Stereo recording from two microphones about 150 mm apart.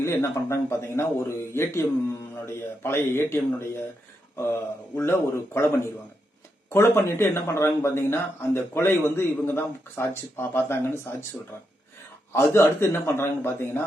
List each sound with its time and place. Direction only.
0.0 s a man's voice: 20° left (ahead or behind)
12.3 s speech: 15° left (ahead or behind)